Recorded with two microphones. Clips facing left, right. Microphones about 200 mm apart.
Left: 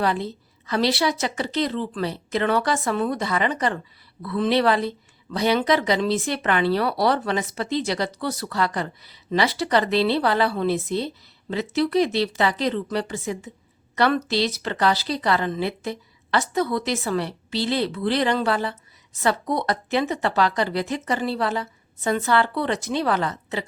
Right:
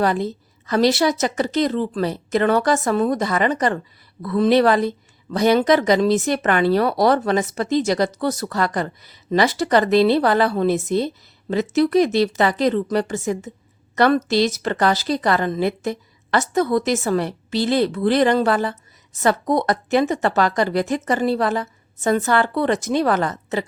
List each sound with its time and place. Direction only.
0.0 s speech: 45° right (ahead or behind)